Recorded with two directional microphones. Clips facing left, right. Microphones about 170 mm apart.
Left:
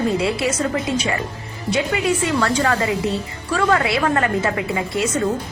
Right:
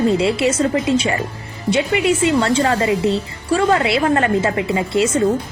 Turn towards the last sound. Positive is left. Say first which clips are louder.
# right 4 dB
turn(degrees=-25)  # may be behind; listen again after turning